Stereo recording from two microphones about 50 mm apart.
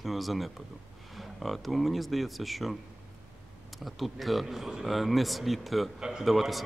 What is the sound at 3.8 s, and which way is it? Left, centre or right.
Speech, centre.